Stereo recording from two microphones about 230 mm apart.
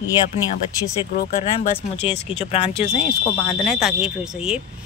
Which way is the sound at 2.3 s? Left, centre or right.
Left.